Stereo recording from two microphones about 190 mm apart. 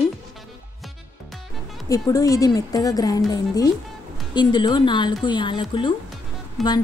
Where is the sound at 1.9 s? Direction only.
15° left (ahead or behind).